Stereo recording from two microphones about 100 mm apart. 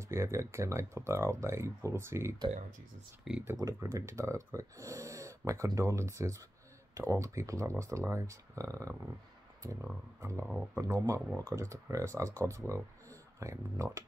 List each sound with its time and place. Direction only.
0.1 s speech: 30° right (ahead or behind)
3.5 s speech: 35° right (ahead or behind)
10.4 s speech: 10° right (ahead or behind)
10.8 s speech: 30° right (ahead or behind)